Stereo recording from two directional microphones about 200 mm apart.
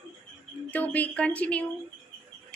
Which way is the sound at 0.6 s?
10° left (ahead or behind).